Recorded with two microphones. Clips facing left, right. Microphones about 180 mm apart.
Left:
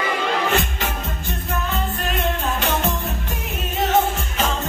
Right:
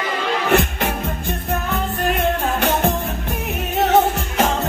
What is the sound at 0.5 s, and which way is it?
Music, 60° right (ahead or behind).